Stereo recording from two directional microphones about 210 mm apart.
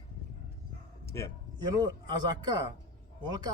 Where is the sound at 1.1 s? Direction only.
15° left (ahead or behind).